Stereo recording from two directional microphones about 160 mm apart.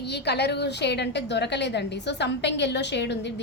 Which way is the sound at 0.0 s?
90° left.